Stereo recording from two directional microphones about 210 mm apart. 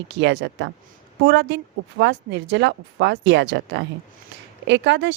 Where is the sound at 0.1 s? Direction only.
55° right (ahead or behind).